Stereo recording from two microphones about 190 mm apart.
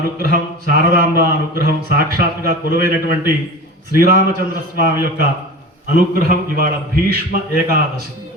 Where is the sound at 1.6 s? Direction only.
50° right (ahead or behind).